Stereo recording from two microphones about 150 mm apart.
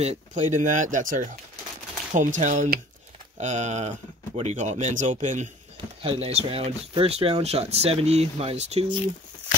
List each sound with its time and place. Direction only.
0.0 s speech: 50° right (ahead or behind)
6.0 s speech: 45° right (ahead or behind)